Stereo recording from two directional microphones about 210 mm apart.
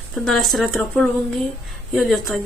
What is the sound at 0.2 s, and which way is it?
A woman's voice, centre (ahead or behind).